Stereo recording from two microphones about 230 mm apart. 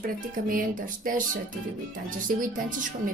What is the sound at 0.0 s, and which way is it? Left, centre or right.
Speech, right.